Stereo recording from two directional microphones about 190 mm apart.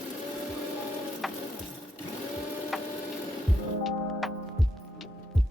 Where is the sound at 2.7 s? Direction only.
Centre (ahead or behind).